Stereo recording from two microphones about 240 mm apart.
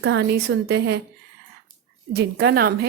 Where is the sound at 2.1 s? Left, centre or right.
Right.